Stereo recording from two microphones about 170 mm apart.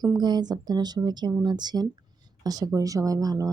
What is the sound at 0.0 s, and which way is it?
Speech, 25° right (ahead or behind).